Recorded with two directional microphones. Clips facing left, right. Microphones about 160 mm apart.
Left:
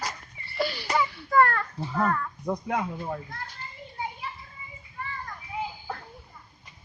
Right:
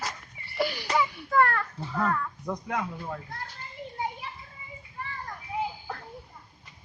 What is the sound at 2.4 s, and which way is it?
Speech, 25° left (ahead or behind).